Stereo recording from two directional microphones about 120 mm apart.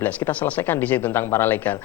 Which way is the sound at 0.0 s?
15° left (ahead or behind).